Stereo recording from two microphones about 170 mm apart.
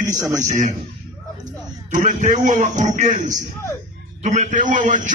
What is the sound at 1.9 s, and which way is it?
A man's voice, 45° right (ahead or behind).